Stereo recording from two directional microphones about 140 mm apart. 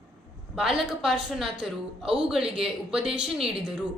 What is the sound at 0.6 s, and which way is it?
A woman's voice, 5° right (ahead or behind).